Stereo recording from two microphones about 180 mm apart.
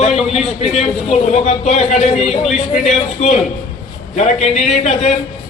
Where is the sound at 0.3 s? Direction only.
35° left (ahead or behind).